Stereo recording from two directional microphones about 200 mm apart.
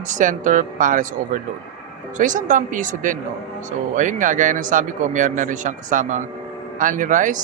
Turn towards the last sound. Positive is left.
turn(degrees=-40)  # may be behind; listen again after turning